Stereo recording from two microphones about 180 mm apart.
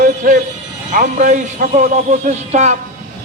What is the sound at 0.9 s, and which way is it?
A man's voice, 45° right (ahead or behind).